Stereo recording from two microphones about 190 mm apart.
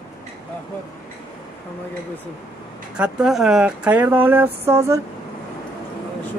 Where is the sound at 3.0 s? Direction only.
5° right (ahead or behind).